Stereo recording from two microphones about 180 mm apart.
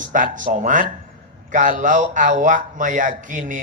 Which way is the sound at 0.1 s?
45° right (ahead or behind).